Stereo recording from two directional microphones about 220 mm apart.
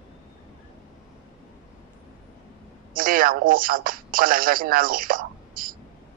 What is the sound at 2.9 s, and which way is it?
Speech, 40° right (ahead or behind).